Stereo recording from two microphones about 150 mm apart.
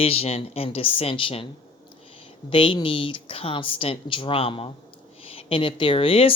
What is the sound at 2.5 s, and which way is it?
Speech, 35° left (ahead or behind).